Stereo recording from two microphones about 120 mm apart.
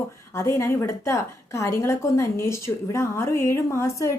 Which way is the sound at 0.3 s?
25° left (ahead or behind).